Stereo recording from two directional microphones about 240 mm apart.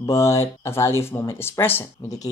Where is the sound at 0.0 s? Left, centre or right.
Centre.